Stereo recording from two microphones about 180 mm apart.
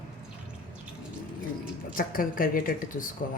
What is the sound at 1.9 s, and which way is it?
A woman's voice, 50° left (ahead or behind).